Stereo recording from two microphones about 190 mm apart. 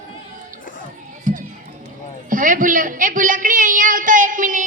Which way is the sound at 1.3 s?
45° right (ahead or behind).